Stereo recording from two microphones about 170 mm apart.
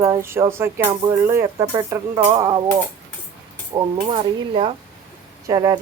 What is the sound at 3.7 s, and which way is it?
Speech, 20° right (ahead or behind).